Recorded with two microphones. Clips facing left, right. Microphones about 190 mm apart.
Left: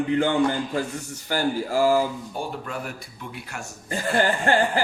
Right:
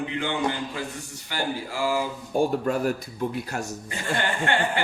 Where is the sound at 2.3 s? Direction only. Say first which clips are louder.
Right 8 dB; 45° right (ahead or behind).